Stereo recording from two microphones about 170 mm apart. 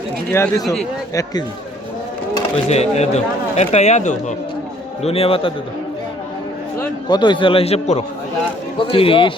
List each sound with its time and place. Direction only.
0.3 s speech: 15° left (ahead or behind)
2.6 s a man's voice: 40° left (ahead or behind)
7.1 s a man's voice: 25° left (ahead or behind)